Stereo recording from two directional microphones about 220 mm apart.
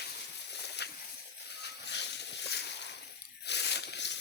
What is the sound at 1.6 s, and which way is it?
Boat, 50° left (ahead or behind).